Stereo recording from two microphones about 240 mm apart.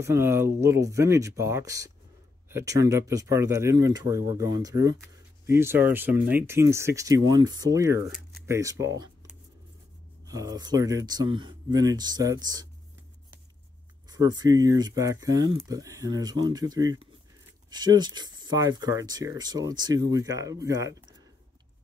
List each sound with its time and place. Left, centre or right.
0.0 s speech: centre
14.0 s speech: centre